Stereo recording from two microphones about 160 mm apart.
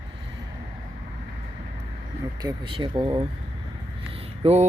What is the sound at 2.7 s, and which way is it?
Speech, 35° right (ahead or behind).